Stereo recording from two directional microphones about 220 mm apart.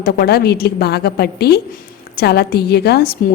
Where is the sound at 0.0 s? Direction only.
45° left (ahead or behind).